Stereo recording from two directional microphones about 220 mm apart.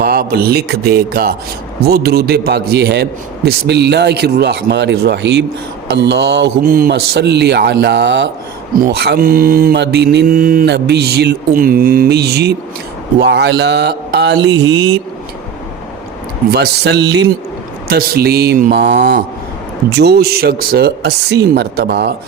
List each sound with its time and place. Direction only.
0.0 s mantra: 45° right (ahead or behind)
16.5 s mantra: 50° right (ahead or behind)